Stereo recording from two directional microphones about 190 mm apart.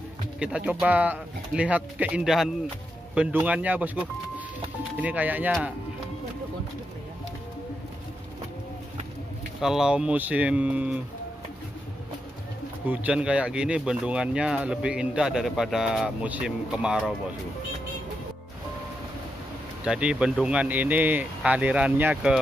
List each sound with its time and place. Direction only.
0.4 s speech: 5° right (ahead or behind)
9.6 s speech: 5° right (ahead or behind)
12.8 s speech: 10° right (ahead or behind)
19.8 s speech: 5° right (ahead or behind)